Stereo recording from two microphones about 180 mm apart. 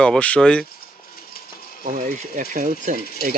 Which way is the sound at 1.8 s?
45° right (ahead or behind).